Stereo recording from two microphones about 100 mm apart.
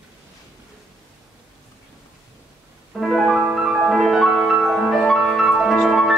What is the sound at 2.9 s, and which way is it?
Music, centre (ahead or behind).